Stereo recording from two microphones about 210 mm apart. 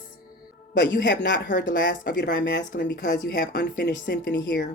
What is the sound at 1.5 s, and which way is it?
Speech, 40° left (ahead or behind).